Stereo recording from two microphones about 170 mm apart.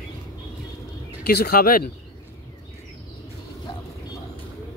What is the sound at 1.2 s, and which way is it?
Speech, 65° left (ahead or behind).